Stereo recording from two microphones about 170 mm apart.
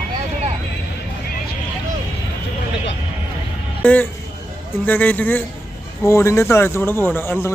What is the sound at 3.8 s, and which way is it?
A man's voice, 10° left (ahead or behind).